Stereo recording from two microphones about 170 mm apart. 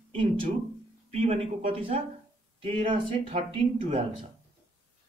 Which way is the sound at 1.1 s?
35° right (ahead or behind).